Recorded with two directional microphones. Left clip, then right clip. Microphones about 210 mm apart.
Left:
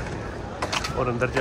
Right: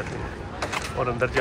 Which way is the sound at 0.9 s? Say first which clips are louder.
Right 3 dB; 10° left (ahead or behind).